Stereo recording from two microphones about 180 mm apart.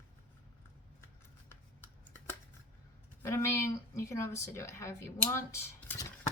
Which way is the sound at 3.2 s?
15° left (ahead or behind).